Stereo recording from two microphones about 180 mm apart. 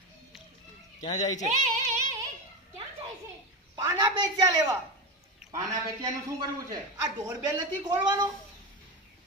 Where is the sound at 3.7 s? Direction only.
25° right (ahead or behind).